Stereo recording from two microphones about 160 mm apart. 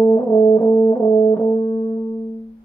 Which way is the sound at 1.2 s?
30° left (ahead or behind).